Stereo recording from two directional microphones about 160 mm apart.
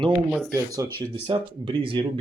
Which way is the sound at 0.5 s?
20° right (ahead or behind).